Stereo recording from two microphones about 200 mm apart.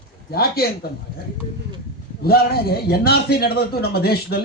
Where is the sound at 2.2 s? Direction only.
50° left (ahead or behind).